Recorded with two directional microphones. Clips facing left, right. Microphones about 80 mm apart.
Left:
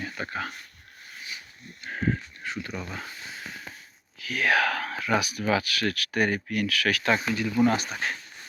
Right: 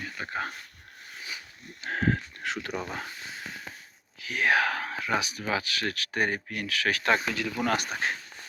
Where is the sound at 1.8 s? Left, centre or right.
Right.